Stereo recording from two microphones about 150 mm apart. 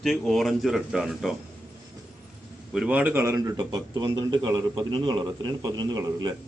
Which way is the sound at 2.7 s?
10° right (ahead or behind).